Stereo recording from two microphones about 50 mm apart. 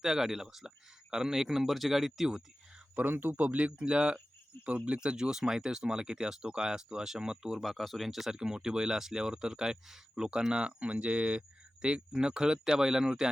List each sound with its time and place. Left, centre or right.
0.0 s speech: centre
2.9 s speech: right
4.5 s speech: left
4.9 s speech: centre
7.6 s speech: centre
8.3 s speech: centre